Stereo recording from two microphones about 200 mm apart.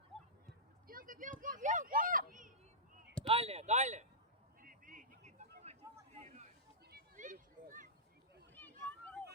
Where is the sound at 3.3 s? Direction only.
30° right (ahead or behind).